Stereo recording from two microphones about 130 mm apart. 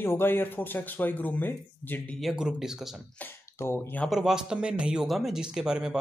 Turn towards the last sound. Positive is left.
turn(degrees=-5)  # may be behind; listen again after turning